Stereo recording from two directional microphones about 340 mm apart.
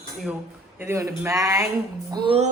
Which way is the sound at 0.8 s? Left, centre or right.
Centre.